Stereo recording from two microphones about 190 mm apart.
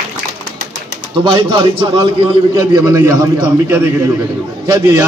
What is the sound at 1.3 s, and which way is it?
A man's voice, 25° right (ahead or behind).